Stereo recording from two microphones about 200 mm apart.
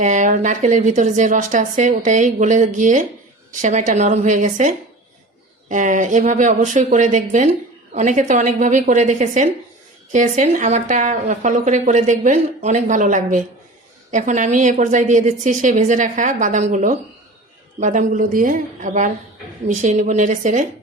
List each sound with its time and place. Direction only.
0.0 s a woman's voice: 40° right (ahead or behind)